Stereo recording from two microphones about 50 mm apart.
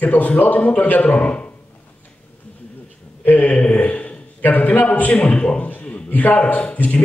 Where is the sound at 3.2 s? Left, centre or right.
Left.